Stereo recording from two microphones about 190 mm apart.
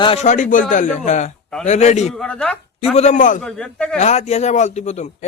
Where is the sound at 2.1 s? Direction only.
5° left (ahead or behind).